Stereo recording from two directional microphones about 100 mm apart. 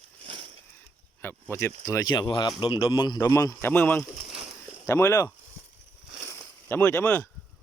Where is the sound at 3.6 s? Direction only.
20° left (ahead or behind).